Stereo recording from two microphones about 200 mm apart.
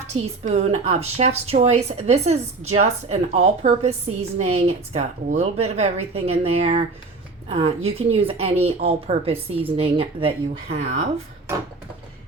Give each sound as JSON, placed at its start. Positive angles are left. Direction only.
{"t": 0.4, "sound": "a woman's voice", "side_deg": -30}